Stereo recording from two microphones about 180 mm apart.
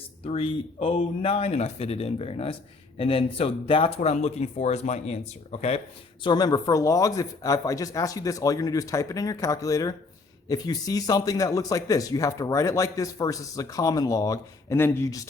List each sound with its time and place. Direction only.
0.3 s speech: 30° left (ahead or behind)
6.2 s speech: 20° left (ahead or behind)